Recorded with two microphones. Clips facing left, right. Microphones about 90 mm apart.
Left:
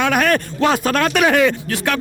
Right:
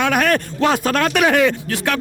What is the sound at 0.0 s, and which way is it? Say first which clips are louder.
Speech: even; 20° left (ahead or behind).